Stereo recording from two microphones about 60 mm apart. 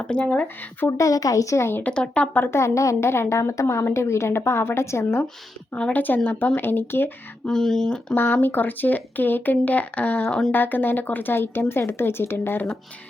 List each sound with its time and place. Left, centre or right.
0.1 s speech: centre
0.9 s speech: left
1.8 s speech: centre
2.5 s a woman's voice: left
5.7 s speech: left
7.4 s speech: centre
8.1 s speech: left
10.2 s speech: centre
10.5 s speech: left